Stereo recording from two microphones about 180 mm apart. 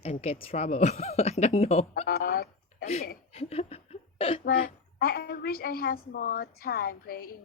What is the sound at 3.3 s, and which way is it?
Laughter, 35° left (ahead or behind).